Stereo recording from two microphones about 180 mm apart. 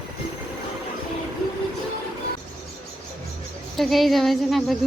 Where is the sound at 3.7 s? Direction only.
Centre (ahead or behind).